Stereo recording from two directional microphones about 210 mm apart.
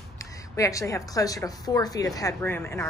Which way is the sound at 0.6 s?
15° left (ahead or behind).